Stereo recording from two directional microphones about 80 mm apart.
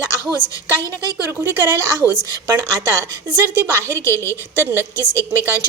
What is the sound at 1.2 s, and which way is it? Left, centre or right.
A woman's voice, right.